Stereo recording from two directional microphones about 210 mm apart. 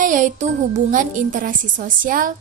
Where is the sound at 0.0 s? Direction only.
40° right (ahead or behind).